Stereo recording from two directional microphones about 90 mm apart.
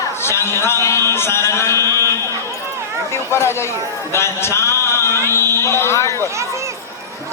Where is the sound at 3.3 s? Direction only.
30° left (ahead or behind).